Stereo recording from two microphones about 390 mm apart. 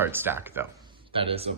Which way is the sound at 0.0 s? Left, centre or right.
Centre.